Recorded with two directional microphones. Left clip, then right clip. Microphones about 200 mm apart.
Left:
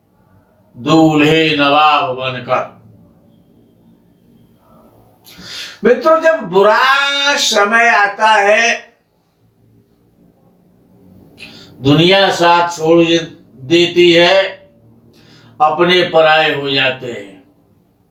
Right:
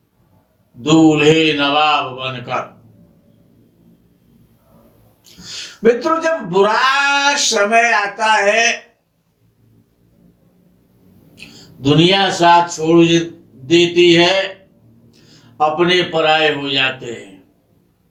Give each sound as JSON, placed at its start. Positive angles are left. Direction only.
{"t": 0.8, "sound": "speech", "side_deg": -45}
{"t": 5.8, "sound": "speech", "side_deg": -45}
{"t": 11.3, "sound": "a man's voice", "side_deg": -45}